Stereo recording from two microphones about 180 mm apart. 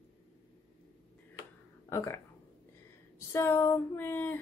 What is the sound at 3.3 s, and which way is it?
Speech, 15° left (ahead or behind).